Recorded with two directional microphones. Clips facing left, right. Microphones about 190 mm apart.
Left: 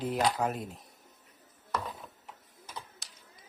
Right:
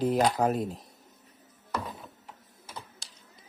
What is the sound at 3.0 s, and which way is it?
Typing, 30° right (ahead or behind).